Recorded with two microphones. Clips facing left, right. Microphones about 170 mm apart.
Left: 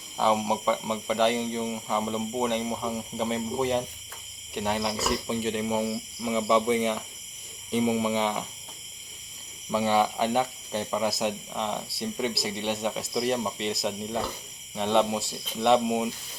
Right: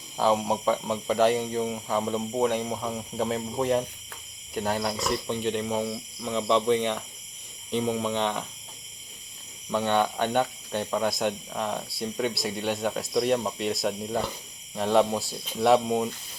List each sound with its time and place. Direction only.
0.2 s speech: centre (ahead or behind)
9.7 s speech: 5° left (ahead or behind)